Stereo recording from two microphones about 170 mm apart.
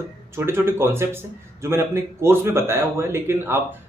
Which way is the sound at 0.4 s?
15° right (ahead or behind).